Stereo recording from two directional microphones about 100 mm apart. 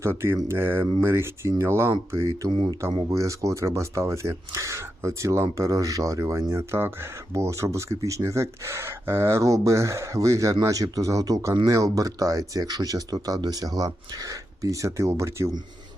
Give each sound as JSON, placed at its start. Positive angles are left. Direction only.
{"t": 0.0, "sound": "speech", "side_deg": -25}